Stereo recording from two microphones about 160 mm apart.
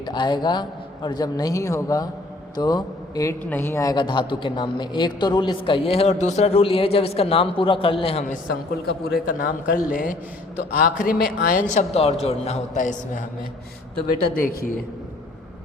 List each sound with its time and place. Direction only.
0.0 s a man's voice: 30° left (ahead or behind)
9.2 s a man's voice: 60° left (ahead or behind)
14.3 s a man's voice: 65° left (ahead or behind)